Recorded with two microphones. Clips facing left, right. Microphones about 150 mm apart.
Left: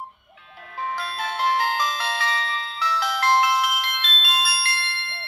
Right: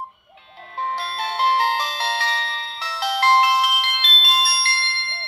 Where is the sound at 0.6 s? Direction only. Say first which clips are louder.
Right 2 dB; 30° right (ahead or behind).